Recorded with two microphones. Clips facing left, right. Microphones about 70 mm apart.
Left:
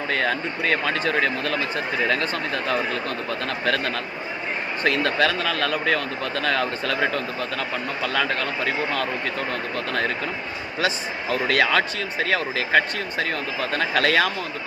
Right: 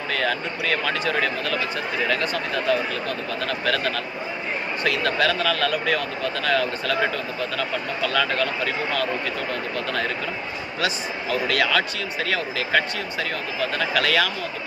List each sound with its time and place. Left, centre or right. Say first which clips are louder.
0.1 s speech: even; left
8.0 s speech: right 2 dB; left
10.8 s speech: left 1 dB; left